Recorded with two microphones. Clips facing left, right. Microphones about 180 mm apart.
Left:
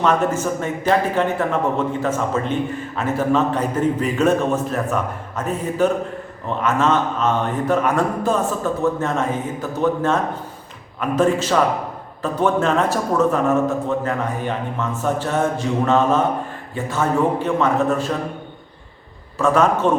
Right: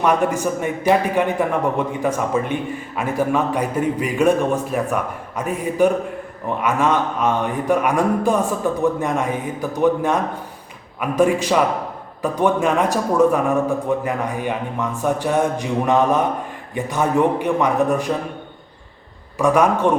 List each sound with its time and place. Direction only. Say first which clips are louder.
0.0 s a man's voice: even; 15° right (ahead or behind)
19.4 s a man's voice: right 1 dB; 15° right (ahead or behind)